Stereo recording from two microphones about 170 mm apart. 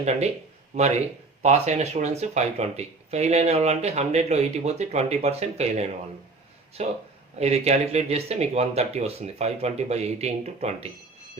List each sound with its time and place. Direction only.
0.0 s speech: 40° right (ahead or behind)